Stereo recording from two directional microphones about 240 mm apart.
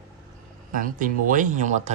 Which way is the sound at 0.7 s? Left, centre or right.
Right.